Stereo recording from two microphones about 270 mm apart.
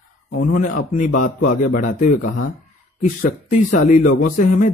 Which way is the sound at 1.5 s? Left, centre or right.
Left.